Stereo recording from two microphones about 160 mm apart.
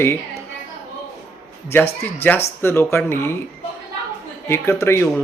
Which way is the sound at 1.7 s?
15° left (ahead or behind).